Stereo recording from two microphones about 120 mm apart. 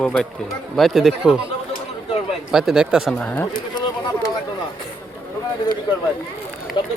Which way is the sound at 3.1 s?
10° left (ahead or behind).